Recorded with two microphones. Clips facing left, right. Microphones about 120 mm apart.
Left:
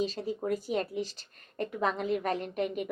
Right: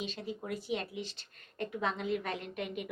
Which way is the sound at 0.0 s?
40° left (ahead or behind).